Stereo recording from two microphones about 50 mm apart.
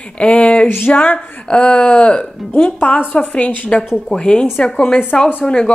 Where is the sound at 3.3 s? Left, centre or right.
Left.